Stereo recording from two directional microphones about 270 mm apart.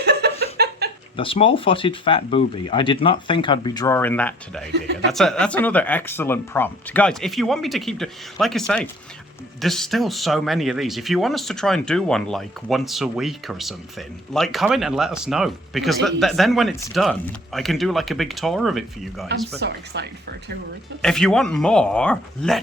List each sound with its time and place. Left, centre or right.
0.0 s a sound: right
1.1 s speech: centre
19.5 s speech: right
21.0 s speech: centre